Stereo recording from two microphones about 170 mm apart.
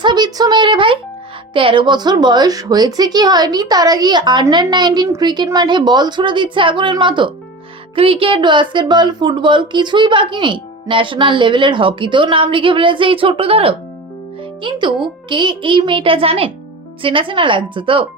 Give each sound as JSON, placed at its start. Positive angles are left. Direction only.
{"t": 0.0, "sound": "a woman's voice", "side_deg": -25}